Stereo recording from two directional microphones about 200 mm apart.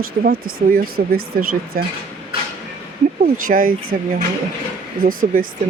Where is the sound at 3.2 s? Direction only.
45° right (ahead or behind).